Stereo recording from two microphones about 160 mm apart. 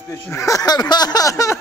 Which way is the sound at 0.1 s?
20° left (ahead or behind).